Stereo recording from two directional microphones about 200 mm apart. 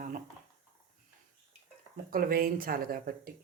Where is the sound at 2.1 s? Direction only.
45° right (ahead or behind).